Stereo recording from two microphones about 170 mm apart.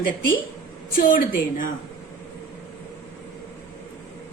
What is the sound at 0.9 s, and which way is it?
Speech, 55° left (ahead or behind).